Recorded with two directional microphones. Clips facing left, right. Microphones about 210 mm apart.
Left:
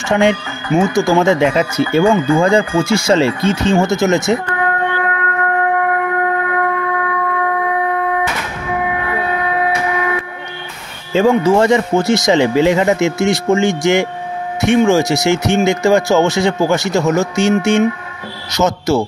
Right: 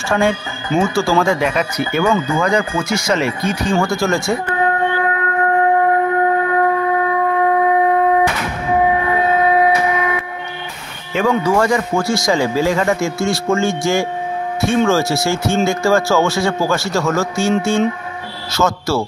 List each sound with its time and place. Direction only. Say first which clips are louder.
0.1 s speech: left 3 dB; 20° left (ahead or behind)
4.6 s shofar: right 1 dB; 25° right (ahead or behind)
7.8 s a sound: right 4 dB; 30° right (ahead or behind)
8.9 s train: right 3 dB; 25° right (ahead or behind)
11.1 s speech: left 4 dB; 25° left (ahead or behind)